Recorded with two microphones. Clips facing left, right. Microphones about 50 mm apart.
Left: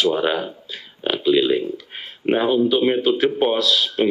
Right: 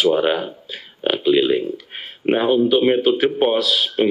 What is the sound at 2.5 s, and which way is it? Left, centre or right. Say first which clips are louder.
Speech: right 4 dB; centre.